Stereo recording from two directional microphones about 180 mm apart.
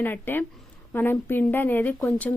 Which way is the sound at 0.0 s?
10° left (ahead or behind).